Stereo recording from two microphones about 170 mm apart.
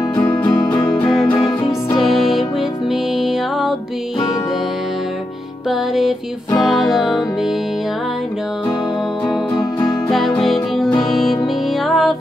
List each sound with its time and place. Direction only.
0.4 s music: 25° left (ahead or behind)
1.1 s music: 5° left (ahead or behind)
5.7 s music: centre (ahead or behind)
9.6 s music: 15° left (ahead or behind)
10.1 s music: centre (ahead or behind)